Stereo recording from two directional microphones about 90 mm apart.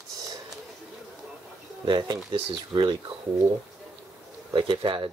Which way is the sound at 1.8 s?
55° right (ahead or behind).